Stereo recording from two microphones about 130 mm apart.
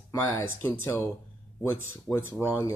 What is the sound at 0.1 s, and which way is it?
Speech, 20° left (ahead or behind).